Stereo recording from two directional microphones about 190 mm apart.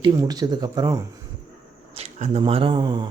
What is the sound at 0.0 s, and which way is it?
Speech, 20° right (ahead or behind).